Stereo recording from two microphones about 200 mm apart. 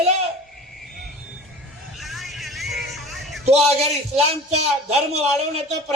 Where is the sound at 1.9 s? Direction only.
Centre (ahead or behind).